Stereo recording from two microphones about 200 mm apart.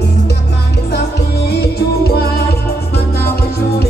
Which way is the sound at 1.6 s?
55° left (ahead or behind).